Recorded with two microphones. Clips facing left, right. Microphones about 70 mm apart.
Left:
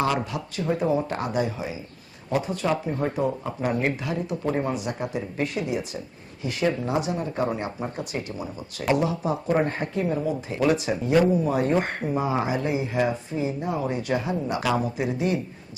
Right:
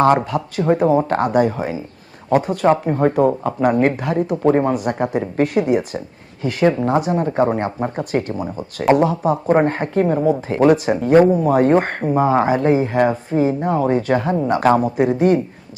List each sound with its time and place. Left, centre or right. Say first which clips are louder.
0.3 s speech: right 9 dB; right